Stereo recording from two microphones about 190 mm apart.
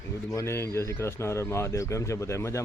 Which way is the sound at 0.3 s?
15° left (ahead or behind).